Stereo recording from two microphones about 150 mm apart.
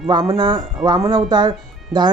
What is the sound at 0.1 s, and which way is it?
Speech, 25° right (ahead or behind).